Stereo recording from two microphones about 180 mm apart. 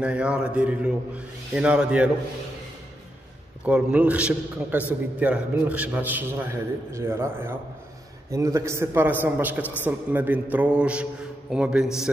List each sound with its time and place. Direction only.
0.0 s a man's voice: 5° right (ahead or behind)
3.6 s a man's voice: 10° right (ahead or behind)